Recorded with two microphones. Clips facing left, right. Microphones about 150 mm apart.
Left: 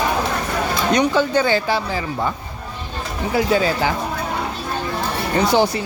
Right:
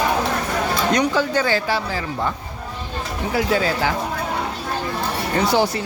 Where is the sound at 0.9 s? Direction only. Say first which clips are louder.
Left 4 dB; 20° left (ahead or behind).